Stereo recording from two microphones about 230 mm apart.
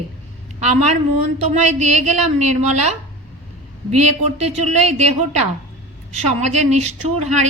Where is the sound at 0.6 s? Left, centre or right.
Right.